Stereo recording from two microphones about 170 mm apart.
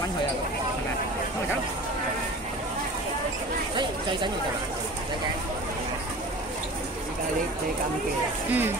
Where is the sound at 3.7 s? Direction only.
30° right (ahead or behind).